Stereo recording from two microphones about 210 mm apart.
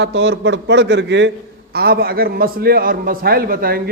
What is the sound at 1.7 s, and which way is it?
A man's voice, 45° right (ahead or behind).